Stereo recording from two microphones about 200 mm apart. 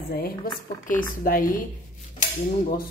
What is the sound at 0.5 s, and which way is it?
Speech, 45° left (ahead or behind).